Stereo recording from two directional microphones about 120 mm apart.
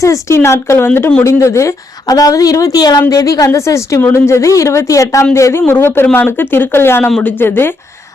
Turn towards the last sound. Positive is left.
turn(degrees=15)  # may be behind; listen again after turning